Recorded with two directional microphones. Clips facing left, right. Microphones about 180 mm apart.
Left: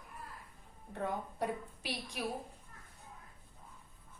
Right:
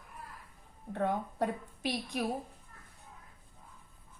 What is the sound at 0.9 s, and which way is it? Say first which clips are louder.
A woman's voice: right 6 dB; 60° right (ahead or behind).